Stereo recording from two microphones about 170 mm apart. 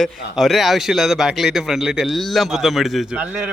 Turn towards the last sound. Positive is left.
turn(degrees=-5)  # may be behind; listen again after turning